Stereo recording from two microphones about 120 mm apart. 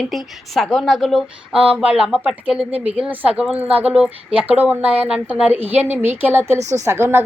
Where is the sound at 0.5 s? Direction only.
Centre (ahead or behind).